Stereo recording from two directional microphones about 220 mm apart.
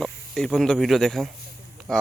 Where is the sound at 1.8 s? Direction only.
Centre (ahead or behind).